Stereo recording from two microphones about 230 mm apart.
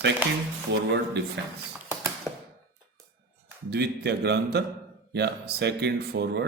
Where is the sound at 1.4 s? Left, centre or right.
Right.